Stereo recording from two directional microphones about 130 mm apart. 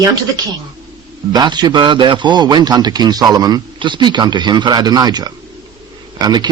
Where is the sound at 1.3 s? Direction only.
35° right (ahead or behind).